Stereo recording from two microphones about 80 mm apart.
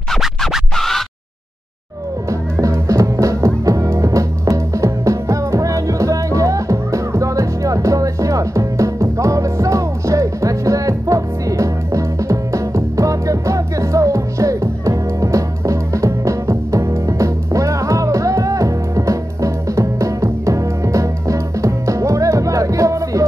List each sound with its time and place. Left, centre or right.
0.1 s music: centre
2.2 s music: right